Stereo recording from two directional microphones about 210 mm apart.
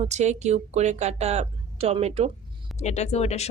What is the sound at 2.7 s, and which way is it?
Speech, 30° left (ahead or behind).